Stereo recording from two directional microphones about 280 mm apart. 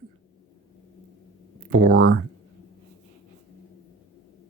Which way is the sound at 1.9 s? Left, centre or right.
Right.